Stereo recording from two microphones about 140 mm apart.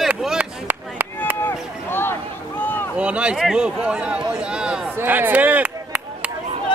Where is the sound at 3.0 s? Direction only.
10° right (ahead or behind).